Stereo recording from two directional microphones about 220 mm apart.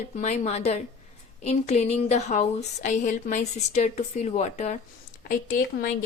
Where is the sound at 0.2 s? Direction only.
30° left (ahead or behind).